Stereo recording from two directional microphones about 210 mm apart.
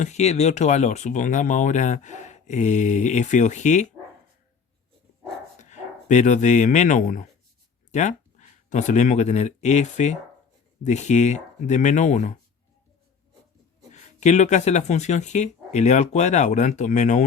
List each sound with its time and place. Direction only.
0.0 s speech: 35° left (ahead or behind)
5.5 s speech: 35° left (ahead or behind)
13.9 s speech: 35° left (ahead or behind)